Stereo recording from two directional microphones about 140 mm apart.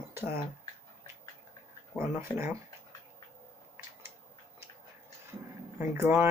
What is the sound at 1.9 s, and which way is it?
Speech, 15° right (ahead or behind).